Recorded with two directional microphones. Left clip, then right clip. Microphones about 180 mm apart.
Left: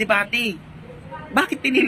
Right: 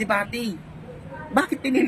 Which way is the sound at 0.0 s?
10° right (ahead or behind).